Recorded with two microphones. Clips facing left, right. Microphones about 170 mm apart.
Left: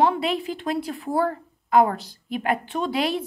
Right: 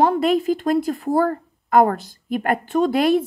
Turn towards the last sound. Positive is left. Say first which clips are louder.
# right 8 dB
turn(degrees=-50)  # may be behind; listen again after turning